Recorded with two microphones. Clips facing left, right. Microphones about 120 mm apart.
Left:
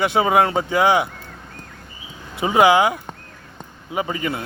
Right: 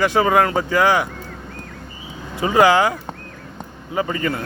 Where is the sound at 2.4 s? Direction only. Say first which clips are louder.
Even; 15° left (ahead or behind).